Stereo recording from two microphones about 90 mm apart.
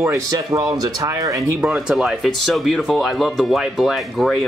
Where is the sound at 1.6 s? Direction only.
10° right (ahead or behind).